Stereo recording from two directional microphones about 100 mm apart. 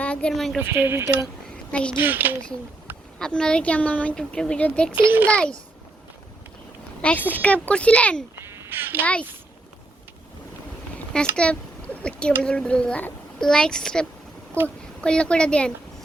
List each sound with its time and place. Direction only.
0.0 s a woman's voice: 10° left (ahead or behind)
0.6 s speech: 25° right (ahead or behind)
1.7 s speech: 10° left (ahead or behind)
2.0 s speech: 20° right (ahead or behind)
3.2 s speech: 5° left (ahead or behind)
4.9 s speech: 20° right (ahead or behind)
5.3 s speech: 10° left (ahead or behind)
7.0 s speech: 15° left (ahead or behind)
8.4 s a sound: 25° right (ahead or behind)
11.1 s speech: 10° left (ahead or behind)